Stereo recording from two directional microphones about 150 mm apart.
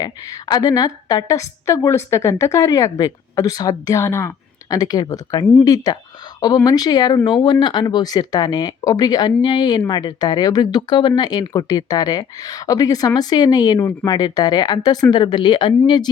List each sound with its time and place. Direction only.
0.0 s a woman's voice: 25° left (ahead or behind)